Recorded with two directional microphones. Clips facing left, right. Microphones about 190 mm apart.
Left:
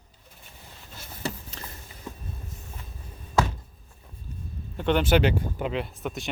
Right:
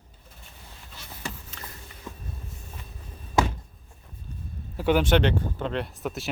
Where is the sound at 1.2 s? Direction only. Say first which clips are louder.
Left 5 dB; 35° left (ahead or behind).